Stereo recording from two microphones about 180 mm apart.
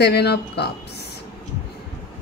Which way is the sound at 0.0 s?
65° left (ahead or behind).